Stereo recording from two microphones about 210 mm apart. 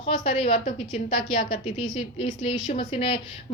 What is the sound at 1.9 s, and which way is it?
A woman's voice, 25° left (ahead or behind).